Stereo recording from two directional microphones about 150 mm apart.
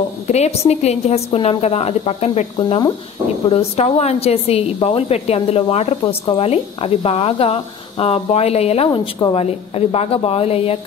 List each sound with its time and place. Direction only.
0.3 s a woman's voice: 45° left (ahead or behind)